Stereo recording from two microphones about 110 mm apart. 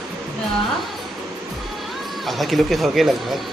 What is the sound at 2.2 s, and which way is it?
Speech, centre (ahead or behind).